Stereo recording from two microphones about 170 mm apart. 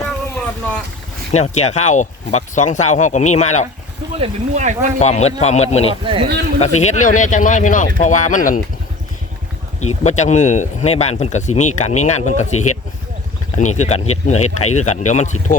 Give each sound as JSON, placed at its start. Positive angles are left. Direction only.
{"t": 0.0, "sound": "boat", "side_deg": 5}
{"t": 1.3, "sound": "speech", "side_deg": 40}
{"t": 4.2, "sound": "speech", "side_deg": -45}
{"t": 4.9, "sound": "speech", "side_deg": 40}
{"t": 9.8, "sound": "speech", "side_deg": 40}
{"t": 13.6, "sound": "speech", "side_deg": 45}